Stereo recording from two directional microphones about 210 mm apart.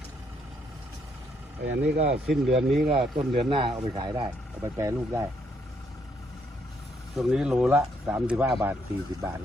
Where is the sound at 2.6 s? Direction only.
Centre (ahead or behind).